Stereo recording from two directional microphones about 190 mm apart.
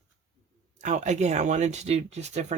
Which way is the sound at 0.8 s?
35° right (ahead or behind).